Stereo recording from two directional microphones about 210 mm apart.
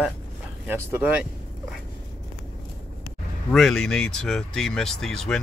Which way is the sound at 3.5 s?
Centre (ahead or behind).